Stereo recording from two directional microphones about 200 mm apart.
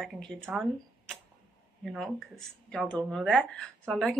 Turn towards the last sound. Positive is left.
turn(degrees=5)  # may be behind; listen again after turning